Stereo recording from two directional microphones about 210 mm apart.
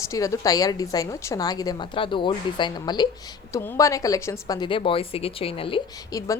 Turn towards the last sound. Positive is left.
turn(degrees=15)  # may be behind; listen again after turning